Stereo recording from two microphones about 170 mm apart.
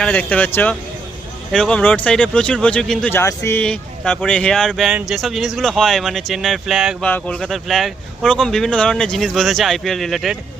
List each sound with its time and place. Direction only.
0.0 s speech: 10° left (ahead or behind)
3.1 s speech: 15° left (ahead or behind)